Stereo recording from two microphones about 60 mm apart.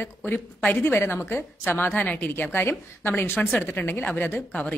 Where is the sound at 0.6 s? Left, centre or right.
Left.